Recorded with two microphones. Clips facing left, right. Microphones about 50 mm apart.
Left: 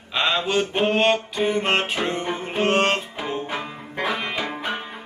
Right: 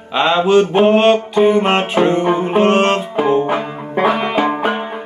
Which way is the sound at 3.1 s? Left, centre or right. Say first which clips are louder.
Right 13 dB; right.